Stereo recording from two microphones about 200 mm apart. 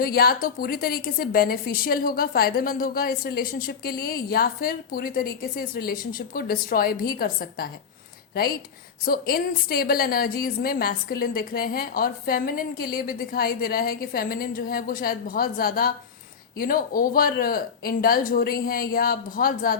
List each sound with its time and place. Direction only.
0.0 s a woman's voice: 50° left (ahead or behind)
9.0 s a woman's voice: 45° left (ahead or behind)